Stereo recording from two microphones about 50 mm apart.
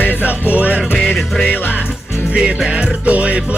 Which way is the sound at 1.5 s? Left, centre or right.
Left.